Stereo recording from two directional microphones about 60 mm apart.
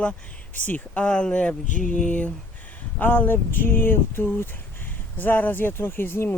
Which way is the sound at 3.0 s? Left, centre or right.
Left.